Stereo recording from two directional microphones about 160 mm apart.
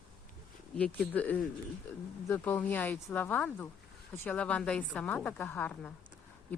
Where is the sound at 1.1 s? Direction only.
10° left (ahead or behind).